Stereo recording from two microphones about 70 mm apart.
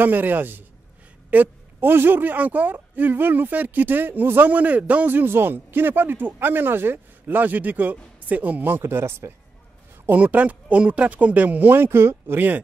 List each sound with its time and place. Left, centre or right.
0.0 s a woman's voice: right
10.0 s a woman's voice: right